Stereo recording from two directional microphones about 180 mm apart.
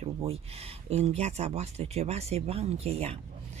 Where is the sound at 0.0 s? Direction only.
35° right (ahead or behind).